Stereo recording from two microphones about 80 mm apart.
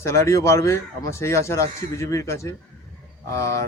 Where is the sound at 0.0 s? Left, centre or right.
Left.